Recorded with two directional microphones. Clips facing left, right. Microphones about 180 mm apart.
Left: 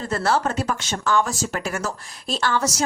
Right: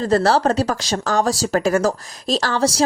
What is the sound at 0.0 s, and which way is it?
Speech, 35° right (ahead or behind).